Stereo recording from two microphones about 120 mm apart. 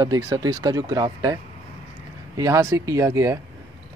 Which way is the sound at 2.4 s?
25° right (ahead or behind).